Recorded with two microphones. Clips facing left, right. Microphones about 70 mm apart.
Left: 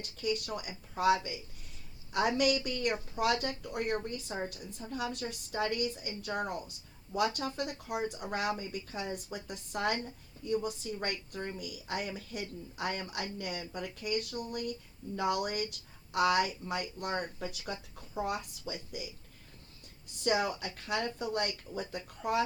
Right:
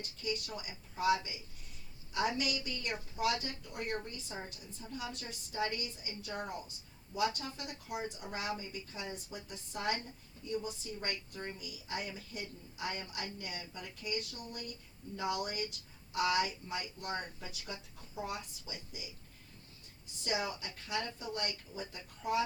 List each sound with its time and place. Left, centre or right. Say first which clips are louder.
0.0 s a woman's voice: left 5 dB; left
2.4 s a woman's voice: left 9 dB; left
20.2 s a woman's voice: left 6 dB; left